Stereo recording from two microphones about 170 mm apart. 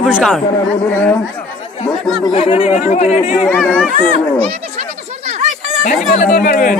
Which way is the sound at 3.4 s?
10° left (ahead or behind).